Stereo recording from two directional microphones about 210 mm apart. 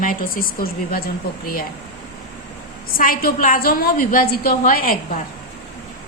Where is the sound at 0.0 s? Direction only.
40° left (ahead or behind).